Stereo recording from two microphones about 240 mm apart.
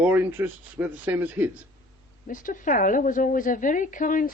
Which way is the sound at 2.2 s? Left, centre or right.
Left.